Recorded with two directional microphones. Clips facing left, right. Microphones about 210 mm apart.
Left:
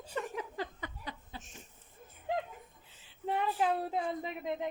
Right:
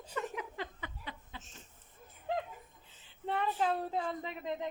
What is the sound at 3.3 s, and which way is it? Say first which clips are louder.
Speech: left 1 dB; 15° left (ahead or behind).